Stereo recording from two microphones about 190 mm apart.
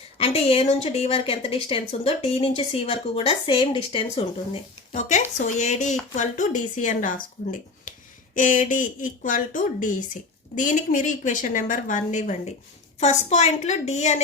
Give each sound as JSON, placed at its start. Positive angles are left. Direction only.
{"t": 0.2, "sound": "a woman's voice", "side_deg": 30}